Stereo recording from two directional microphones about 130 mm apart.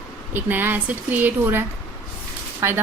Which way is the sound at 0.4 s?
15° right (ahead or behind).